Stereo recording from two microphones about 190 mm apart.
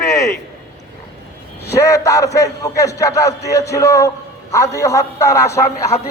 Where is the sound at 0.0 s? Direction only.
15° left (ahead or behind).